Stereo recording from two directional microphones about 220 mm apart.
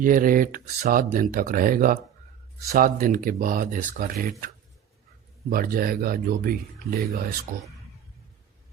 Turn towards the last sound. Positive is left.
turn(degrees=-45)  # may be behind; listen again after turning